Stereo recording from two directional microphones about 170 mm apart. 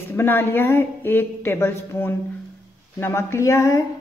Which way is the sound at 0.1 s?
10° left (ahead or behind).